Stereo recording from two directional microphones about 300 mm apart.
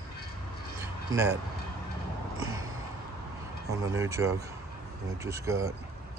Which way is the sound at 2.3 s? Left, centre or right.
Right.